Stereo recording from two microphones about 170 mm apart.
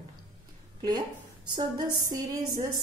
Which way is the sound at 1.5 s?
20° right (ahead or behind).